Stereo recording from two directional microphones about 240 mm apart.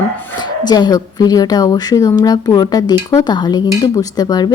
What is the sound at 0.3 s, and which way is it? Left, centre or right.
A woman's voice, centre.